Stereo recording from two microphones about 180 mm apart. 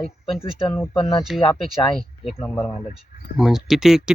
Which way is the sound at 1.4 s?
25° left (ahead or behind).